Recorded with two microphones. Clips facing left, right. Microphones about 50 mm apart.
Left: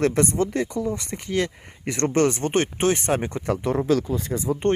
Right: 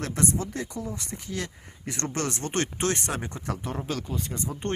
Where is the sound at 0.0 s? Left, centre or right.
Left.